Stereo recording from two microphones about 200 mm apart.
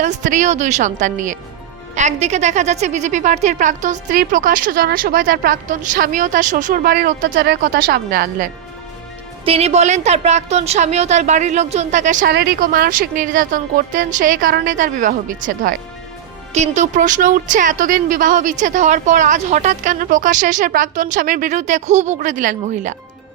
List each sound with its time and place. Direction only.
0.0 s a woman's voice: 40° right (ahead or behind)
9.4 s a woman's voice: 30° right (ahead or behind)
12.3 s a woman's voice: 55° right (ahead or behind); by 23.0 s 40° right (ahead or behind)